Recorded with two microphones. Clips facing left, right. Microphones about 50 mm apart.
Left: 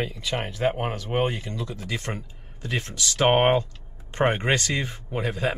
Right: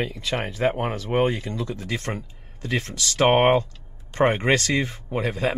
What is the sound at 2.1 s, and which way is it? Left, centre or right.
Speech, centre.